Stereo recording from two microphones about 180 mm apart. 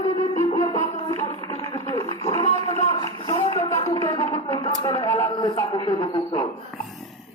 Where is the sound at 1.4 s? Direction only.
30° left (ahead or behind).